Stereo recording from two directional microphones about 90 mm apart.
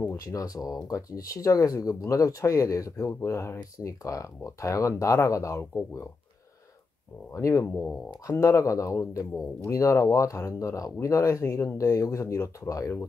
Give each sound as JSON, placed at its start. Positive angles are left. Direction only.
{"t": 0.3, "sound": "speech", "side_deg": 40}
{"t": 7.3, "sound": "speech", "side_deg": 35}
{"t": 7.7, "sound": "speech", "side_deg": 10}
{"t": 8.3, "sound": "speech", "side_deg": 35}